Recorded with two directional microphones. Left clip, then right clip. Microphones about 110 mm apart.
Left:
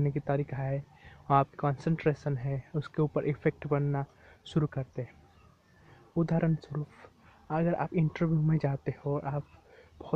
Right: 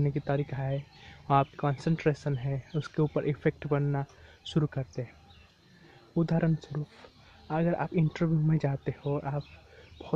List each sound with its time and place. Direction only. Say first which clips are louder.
0.0 s speech: even; 15° right (ahead or behind)
6.1 s speech: right 1 dB; 15° right (ahead or behind)